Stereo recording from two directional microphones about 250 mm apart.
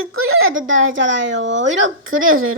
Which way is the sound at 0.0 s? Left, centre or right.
Right.